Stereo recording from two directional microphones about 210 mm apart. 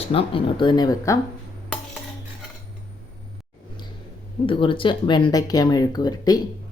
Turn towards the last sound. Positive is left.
turn(degrees=20)  # may be behind; listen again after turning